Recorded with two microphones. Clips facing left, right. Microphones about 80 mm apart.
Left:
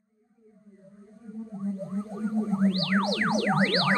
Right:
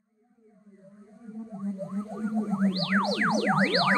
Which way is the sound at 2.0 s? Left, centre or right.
Centre.